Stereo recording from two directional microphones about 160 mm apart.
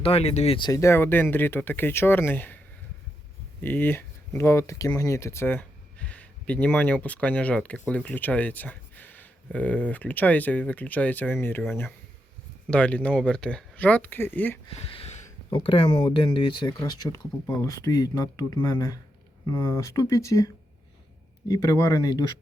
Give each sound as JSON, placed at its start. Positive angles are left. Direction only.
{"t": 0.0, "sound": "speech", "side_deg": 40}
{"t": 0.7, "sound": "speech", "side_deg": 15}
{"t": 3.6, "sound": "speech", "side_deg": 10}
{"t": 12.7, "sound": "speech", "side_deg": 10}
{"t": 14.8, "sound": "a sound", "side_deg": 40}
{"t": 15.5, "sound": "speech", "side_deg": 35}